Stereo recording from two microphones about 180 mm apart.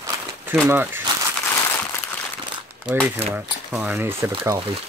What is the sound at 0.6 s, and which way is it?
Speech, 10° right (ahead or behind).